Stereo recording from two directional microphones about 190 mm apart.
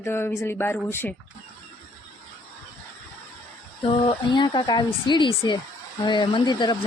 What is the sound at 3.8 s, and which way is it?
Speech, 30° left (ahead or behind).